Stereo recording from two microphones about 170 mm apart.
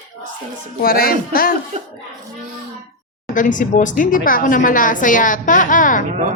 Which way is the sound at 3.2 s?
50° left (ahead or behind).